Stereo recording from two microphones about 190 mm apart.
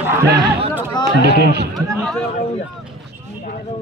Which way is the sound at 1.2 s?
60° right (ahead or behind).